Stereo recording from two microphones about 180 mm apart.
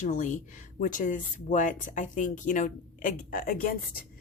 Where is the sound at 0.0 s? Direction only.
45° left (ahead or behind).